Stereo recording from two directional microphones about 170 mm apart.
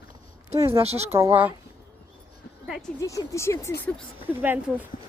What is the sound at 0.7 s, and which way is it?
Speech, 40° right (ahead or behind).